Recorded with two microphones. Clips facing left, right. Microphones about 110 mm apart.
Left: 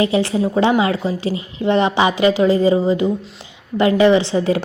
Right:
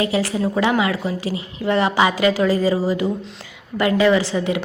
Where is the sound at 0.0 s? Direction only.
25° left (ahead or behind).